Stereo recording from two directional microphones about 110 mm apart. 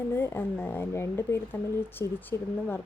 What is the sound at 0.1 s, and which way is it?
Speech, 20° left (ahead or behind).